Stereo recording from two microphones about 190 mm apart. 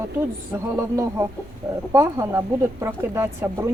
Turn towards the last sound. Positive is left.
turn(degrees=-10)  # may be behind; listen again after turning